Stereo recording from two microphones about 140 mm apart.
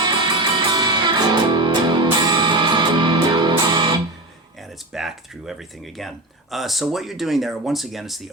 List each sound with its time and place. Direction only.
0.0 s music: 30° right (ahead or behind)
4.9 s speech: 5° right (ahead or behind)